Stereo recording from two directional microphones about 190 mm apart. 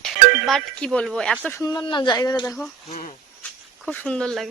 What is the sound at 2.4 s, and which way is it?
Speech, centre (ahead or behind).